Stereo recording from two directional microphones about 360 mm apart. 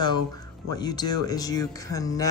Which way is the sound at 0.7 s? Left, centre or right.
Centre.